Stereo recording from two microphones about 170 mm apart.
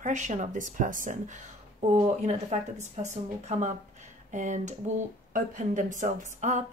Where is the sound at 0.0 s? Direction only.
45° right (ahead or behind).